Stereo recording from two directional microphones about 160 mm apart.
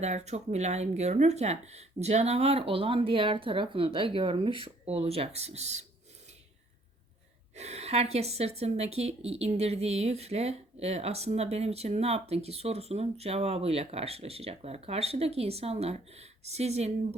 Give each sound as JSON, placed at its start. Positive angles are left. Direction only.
{"t": 0.0, "sound": "a woman's voice", "side_deg": -45}
{"t": 7.5, "sound": "a woman's voice", "side_deg": -45}